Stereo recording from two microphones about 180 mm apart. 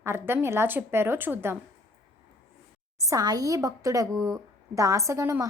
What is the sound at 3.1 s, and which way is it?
A woman's voice, 20° right (ahead or behind).